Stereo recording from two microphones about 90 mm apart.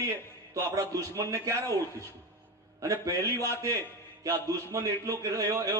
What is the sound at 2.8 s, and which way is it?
A man's voice, 35° right (ahead or behind).